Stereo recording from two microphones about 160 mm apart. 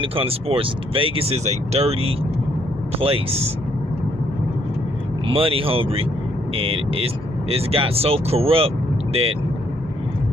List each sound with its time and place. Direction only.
0.0 s speech: 35° right (ahead or behind)
5.3 s speech: 35° right (ahead or behind)